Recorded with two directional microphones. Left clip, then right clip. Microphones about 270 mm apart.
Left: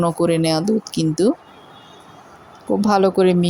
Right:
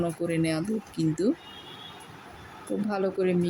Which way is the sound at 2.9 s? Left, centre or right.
Left.